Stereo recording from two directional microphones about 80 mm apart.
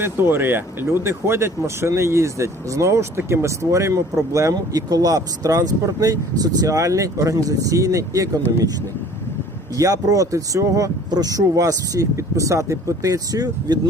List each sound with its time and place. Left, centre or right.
0.0 s speech: right
8.4 s speech: left
9.7 s speech: right